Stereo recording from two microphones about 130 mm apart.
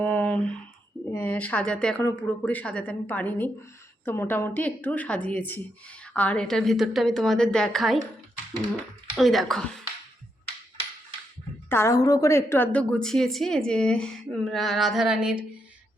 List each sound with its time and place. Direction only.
0.0 s a sound: 15° left (ahead or behind)
1.1 s a woman's voice: 15° left (ahead or behind)
2.0 s a woman's voice: 20° left (ahead or behind)
11.7 s a woman's voice: 20° left (ahead or behind); by 15.4 s 5° right (ahead or behind)